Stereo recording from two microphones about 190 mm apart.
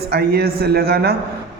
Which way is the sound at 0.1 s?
55° right (ahead or behind).